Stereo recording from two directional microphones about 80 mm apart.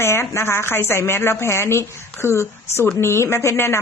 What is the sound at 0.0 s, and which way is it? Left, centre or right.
A woman's voice, left.